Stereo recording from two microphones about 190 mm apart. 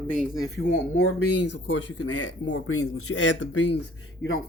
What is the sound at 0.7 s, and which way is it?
Speech, 80° left.